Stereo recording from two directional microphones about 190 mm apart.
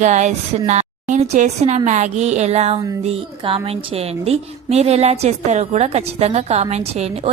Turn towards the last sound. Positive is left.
turn(degrees=-35)  # may be behind; listen again after turning